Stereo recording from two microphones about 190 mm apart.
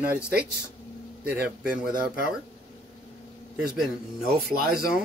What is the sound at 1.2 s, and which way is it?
Speech, 5° right (ahead or behind).